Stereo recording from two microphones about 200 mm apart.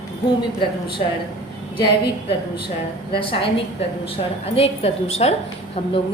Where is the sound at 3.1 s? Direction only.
25° left (ahead or behind).